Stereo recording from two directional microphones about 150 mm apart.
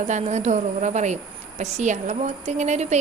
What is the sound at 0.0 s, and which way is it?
A woman's voice, 50° right (ahead or behind).